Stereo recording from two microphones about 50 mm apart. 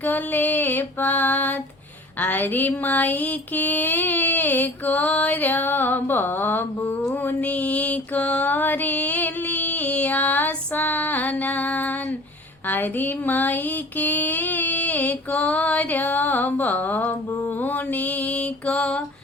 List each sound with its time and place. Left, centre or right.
0.0 s music: left
7.3 s music: left
17.6 s mantra: left; by 18.9 s centre